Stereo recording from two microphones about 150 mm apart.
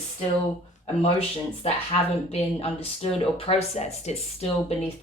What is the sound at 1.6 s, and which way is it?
Speech, 45° left (ahead or behind).